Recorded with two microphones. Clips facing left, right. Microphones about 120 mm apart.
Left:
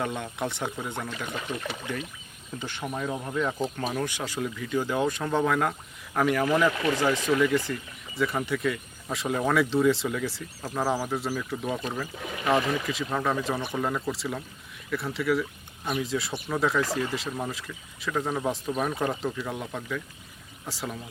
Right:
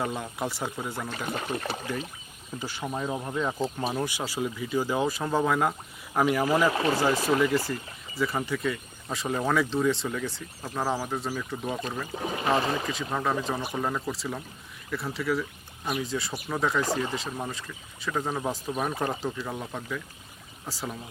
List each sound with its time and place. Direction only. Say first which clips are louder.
0.0 s speech: even; 5° right (ahead or behind)
1.3 s speech: right 2 dB; 40° right (ahead or behind)
2.6 s speech: right 1 dB; 5° right (ahead or behind)
2.8 s speech: even; 20° right (ahead or behind)
6.4 s speech: even; 25° right (ahead or behind)
7.7 s speech: even; centre (ahead or behind)
12.1 s speech: even; 30° right (ahead or behind)
13.1 s speech: left 1 dB; 5° right (ahead or behind)
18.9 s speech: left 1 dB; 30° right (ahead or behind)
19.2 s speech: left 1 dB; centre (ahead or behind)